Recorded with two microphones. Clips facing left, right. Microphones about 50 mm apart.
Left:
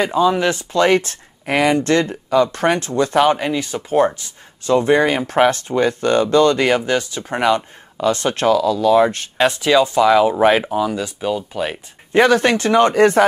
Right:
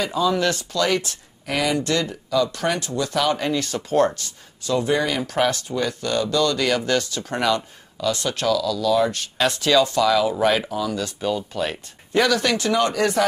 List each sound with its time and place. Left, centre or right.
0.0 s speech: left
0.7 s speech: left
3.3 s speech: centre
4.6 s speech: left
6.8 s speech: centre
9.5 s speech: left
12.1 s speech: left